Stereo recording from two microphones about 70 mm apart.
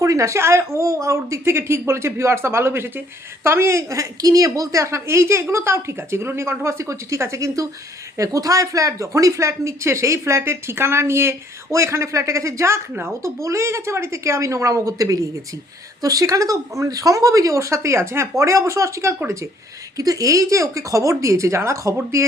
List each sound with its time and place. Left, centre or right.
0.0 s a woman's voice: right